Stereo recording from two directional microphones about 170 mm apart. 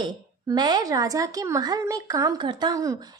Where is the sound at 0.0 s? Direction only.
25° right (ahead or behind).